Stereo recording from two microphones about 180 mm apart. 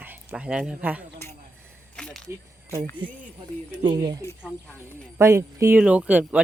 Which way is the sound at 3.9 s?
25° right (ahead or behind).